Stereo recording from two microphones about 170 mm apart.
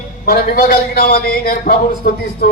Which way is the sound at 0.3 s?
60° left (ahead or behind).